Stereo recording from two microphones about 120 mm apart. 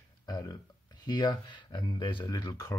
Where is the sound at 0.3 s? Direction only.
35° left (ahead or behind).